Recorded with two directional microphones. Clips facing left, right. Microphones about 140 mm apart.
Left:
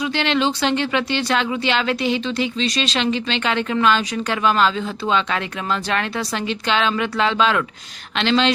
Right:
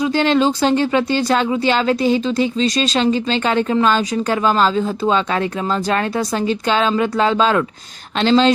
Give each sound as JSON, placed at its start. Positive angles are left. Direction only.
{"t": 0.1, "sound": "speech", "side_deg": -40}